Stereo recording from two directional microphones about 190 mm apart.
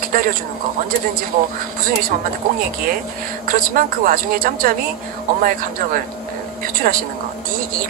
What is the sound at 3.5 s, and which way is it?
Speech, 45° right (ahead or behind).